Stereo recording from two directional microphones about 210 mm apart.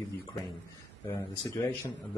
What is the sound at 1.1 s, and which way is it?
Speech, 15° left (ahead or behind).